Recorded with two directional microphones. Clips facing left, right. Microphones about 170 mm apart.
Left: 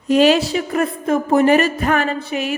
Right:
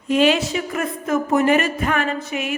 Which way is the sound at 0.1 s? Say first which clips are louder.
Left 4 dB; 35° left (ahead or behind).